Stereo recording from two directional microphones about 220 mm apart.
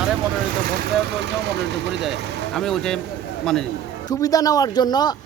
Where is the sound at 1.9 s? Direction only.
Centre (ahead or behind).